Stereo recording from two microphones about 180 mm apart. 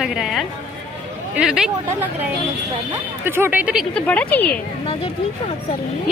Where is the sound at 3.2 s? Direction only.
10° right (ahead or behind); by 4.4 s 10° left (ahead or behind).